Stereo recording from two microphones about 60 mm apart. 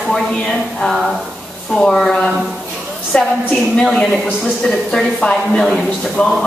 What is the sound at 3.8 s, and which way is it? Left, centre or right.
Speech, centre.